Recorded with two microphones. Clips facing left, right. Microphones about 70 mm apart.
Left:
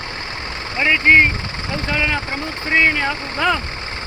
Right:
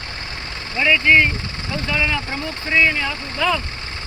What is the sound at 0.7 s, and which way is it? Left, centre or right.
Speech, left.